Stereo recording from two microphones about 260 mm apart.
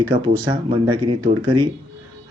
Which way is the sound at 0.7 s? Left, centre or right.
Centre.